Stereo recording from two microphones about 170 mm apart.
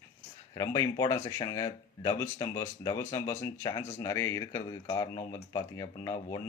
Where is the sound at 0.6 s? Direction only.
20° left (ahead or behind).